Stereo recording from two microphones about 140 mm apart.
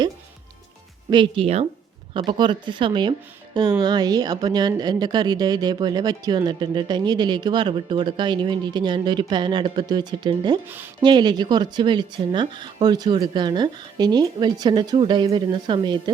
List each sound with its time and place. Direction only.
1.1 s speech: 35° right (ahead or behind)